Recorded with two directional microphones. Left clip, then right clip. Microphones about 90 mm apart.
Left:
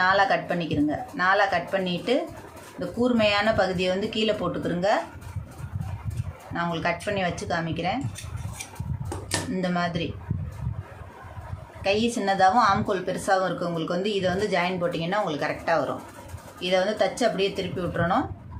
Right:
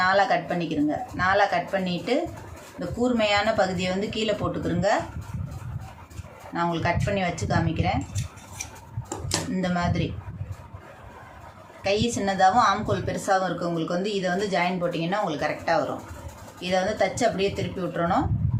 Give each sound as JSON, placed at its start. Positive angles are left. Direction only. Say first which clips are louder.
{"t": 0.0, "sound": "a woman's voice", "louder": "even", "side_deg": 30}
{"t": 6.5, "sound": "a woman's voice", "louder": "right 1 dB", "side_deg": 30}
{"t": 9.6, "sound": "speech", "louder": "left 1 dB", "side_deg": 25}
{"t": 11.8, "sound": "a woman's voice", "louder": "even", "side_deg": 25}